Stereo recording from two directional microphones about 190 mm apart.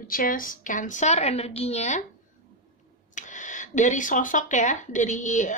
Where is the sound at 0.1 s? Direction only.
50° left (ahead or behind).